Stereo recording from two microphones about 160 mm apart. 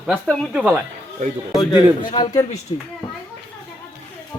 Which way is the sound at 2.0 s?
30° left (ahead or behind).